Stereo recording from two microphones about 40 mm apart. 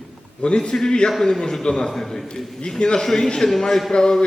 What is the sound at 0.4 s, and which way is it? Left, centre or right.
A man's voice, left.